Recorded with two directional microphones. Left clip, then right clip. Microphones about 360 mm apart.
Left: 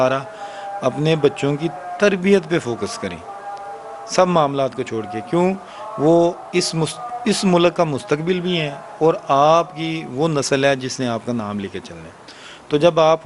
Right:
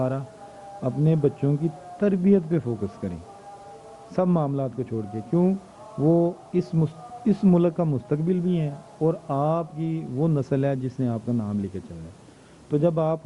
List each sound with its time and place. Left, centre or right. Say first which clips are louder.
0.0 s a man's voice: left 10 dB; centre
6.0 s speech: left 7 dB; left
6.5 s speech: left 7 dB; centre